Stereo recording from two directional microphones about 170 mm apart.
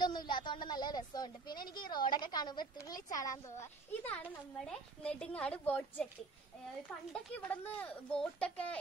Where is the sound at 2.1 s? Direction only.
25° left (ahead or behind); by 6.0 s 10° left (ahead or behind).